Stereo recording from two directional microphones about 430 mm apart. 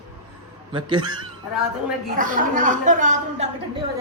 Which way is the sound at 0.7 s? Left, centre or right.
Centre.